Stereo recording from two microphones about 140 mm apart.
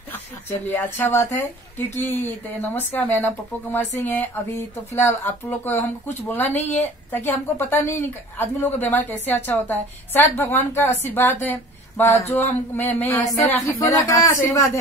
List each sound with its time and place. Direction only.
0.5 s speech: 15° left (ahead or behind)
6.6 s a woman's voice: 55° left (ahead or behind)
7.1 s speech: 15° left (ahead or behind)